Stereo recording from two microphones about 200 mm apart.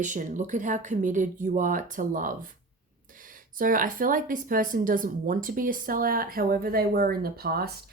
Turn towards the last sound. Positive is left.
turn(degrees=-50)  # may be behind; listen again after turning